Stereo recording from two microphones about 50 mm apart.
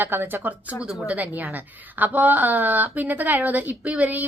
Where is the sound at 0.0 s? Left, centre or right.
Right.